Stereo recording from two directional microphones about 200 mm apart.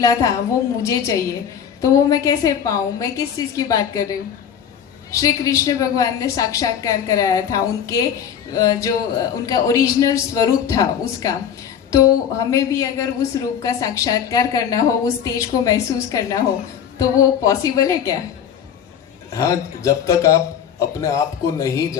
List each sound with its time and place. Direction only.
0.0 s a woman's voice: 15° left (ahead or behind)
12.5 s a woman's voice: 15° left (ahead or behind)
19.3 s a woman's voice: 15° left (ahead or behind)